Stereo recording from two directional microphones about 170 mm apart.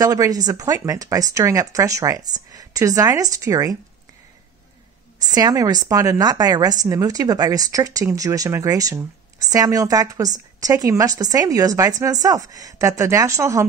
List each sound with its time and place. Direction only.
0.0 s a woman's voice: 20° right (ahead or behind)
5.2 s a woman's voice: 25° right (ahead or behind)